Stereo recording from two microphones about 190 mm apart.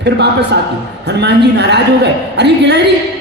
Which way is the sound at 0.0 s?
65° right (ahead or behind).